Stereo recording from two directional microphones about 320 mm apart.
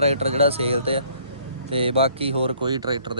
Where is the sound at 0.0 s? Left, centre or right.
Centre.